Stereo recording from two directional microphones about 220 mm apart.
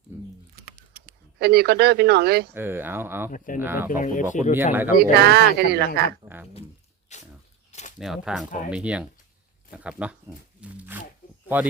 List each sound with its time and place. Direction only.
0.1 s a sound: 10° right (ahead or behind)
1.4 s speech: 45° right (ahead or behind)
2.5 s speech: 10° right (ahead or behind)
3.3 s speech: 40° left (ahead or behind)
3.6 s speech: 10° right (ahead or behind)
3.8 s speech: 35° left (ahead or behind)
4.7 s speech: 10° right (ahead or behind)
5.1 s speech: 45° right (ahead or behind)
6.2 s speech: 10° right (ahead or behind)
7.1 s speech: 30° left (ahead or behind)
7.7 s a sound: 30° left (ahead or behind)
7.9 s speech: centre (ahead or behind)